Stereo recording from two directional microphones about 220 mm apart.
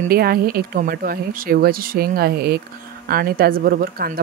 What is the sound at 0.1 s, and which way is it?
Speech, 45° right (ahead or behind).